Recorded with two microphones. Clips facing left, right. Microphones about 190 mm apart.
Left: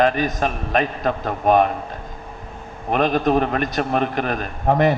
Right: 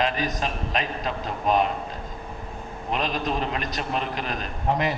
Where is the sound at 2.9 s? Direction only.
55° left (ahead or behind).